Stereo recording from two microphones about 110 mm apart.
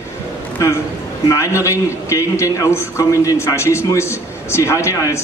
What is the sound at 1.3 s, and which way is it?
A man's voice, 30° left (ahead or behind).